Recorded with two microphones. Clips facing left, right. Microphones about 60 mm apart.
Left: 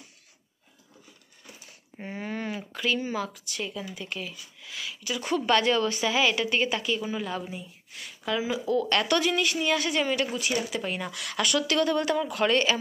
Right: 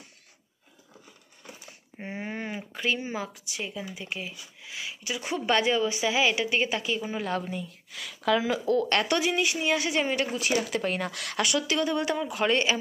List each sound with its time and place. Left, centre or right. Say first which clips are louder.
2.0 s speech: left 1 dB; right
7.2 s speech: right 2 dB; right
7.6 s speech: right 3 dB; right
10.7 s speech: right 3 dB; right
11.1 s speech: left 1 dB; right